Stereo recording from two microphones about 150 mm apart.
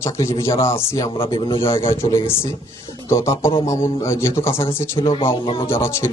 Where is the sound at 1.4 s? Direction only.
35° left (ahead or behind).